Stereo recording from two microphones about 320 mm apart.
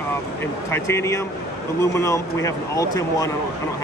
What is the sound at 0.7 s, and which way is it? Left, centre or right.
Speech, centre.